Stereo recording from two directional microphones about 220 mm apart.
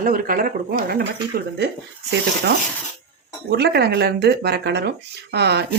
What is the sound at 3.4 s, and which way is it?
Speech, 50° right (ahead or behind).